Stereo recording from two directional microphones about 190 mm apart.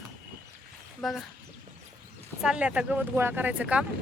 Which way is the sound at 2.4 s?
5° right (ahead or behind).